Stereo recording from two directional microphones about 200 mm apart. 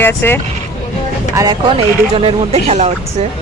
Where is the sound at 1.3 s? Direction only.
20° right (ahead or behind).